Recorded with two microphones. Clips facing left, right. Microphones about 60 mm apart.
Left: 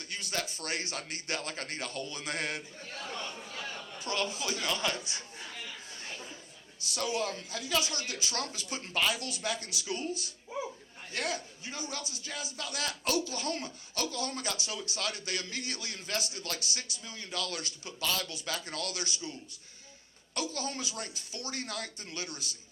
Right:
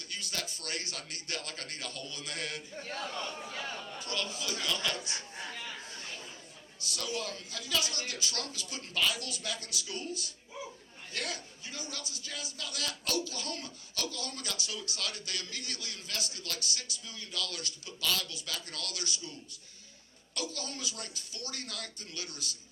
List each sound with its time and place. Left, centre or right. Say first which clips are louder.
0.0 s a man's voice: left 4 dB; left
4.0 s a man's voice: left 5 dB; left
6.8 s a man's voice: left 4 dB; left